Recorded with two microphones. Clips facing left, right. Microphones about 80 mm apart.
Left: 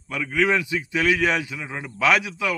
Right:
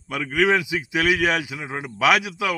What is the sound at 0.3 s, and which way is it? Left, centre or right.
Speech, centre.